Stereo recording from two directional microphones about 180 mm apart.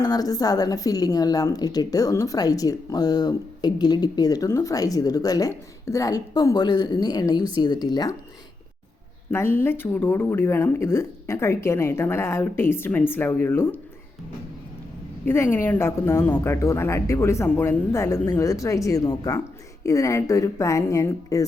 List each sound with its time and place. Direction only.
0.0 s a woman's voice: 20° left (ahead or behind)
9.3 s speech: 15° left (ahead or behind)
15.5 s speech: 10° left (ahead or behind)